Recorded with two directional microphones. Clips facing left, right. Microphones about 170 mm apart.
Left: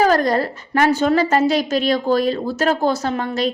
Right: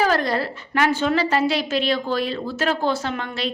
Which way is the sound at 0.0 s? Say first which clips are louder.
Left 5 dB; 45° left (ahead or behind).